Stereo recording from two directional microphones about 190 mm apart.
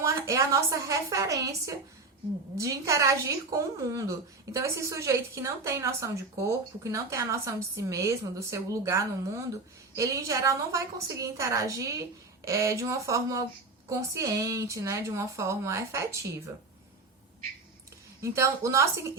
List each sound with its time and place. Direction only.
0.0 s a woman's voice: 15° right (ahead or behind)
18.2 s a woman's voice: 15° right (ahead or behind)